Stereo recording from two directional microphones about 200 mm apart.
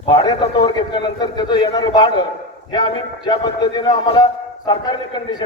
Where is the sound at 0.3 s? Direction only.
20° left (ahead or behind).